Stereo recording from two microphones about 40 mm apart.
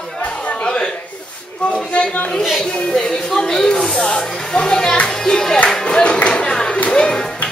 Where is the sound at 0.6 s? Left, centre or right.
Left.